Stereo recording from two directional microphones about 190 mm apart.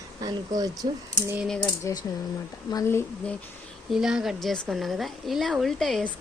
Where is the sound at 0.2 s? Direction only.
20° right (ahead or behind).